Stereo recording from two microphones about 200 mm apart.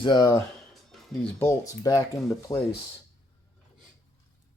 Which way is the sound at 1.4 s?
15° left (ahead or behind).